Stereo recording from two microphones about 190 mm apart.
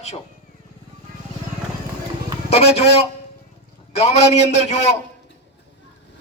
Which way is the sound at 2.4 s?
35° left (ahead or behind).